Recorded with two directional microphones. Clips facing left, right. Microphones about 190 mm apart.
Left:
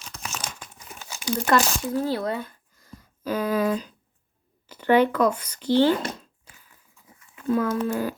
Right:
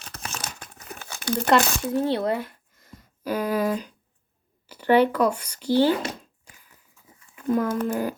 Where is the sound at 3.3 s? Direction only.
10° right (ahead or behind).